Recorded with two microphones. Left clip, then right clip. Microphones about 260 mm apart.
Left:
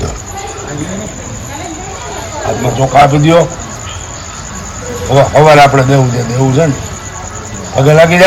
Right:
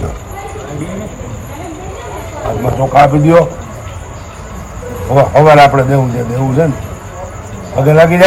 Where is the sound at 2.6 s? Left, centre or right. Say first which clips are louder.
Left 1 dB; left.